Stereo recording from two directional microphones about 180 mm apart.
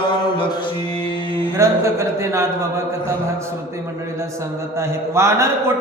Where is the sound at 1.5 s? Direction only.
15° right (ahead or behind).